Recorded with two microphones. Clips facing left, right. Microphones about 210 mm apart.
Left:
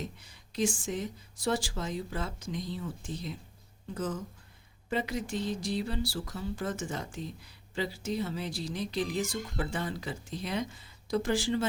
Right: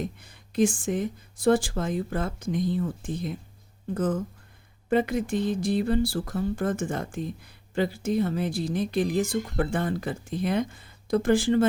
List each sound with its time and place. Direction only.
0.0 s speech: 55° right (ahead or behind)